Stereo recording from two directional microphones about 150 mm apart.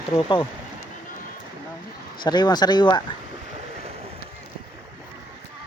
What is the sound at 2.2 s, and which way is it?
Speech, 30° left (ahead or behind).